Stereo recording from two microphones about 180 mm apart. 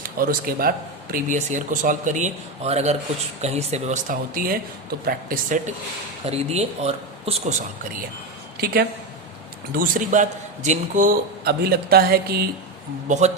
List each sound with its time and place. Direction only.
0.0 s a man's voice: 50° right (ahead or behind)
6.2 s speech: 35° right (ahead or behind)
8.5 s a woman's voice: 60° right (ahead or behind)
13.1 s speech: 40° right (ahead or behind)